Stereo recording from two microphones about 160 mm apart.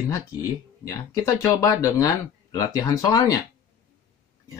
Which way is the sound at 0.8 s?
20° left (ahead or behind).